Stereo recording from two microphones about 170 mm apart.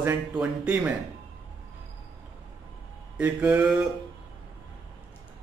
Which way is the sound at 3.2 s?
10° right (ahead or behind).